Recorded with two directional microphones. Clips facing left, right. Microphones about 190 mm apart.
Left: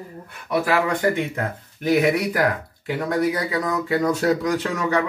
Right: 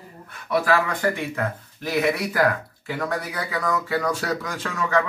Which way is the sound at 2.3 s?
20° left (ahead or behind).